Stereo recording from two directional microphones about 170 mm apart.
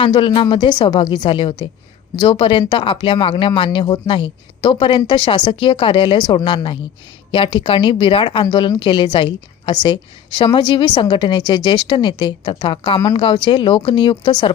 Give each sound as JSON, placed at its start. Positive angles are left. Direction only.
{"t": 0.0, "sound": "speech", "side_deg": 30}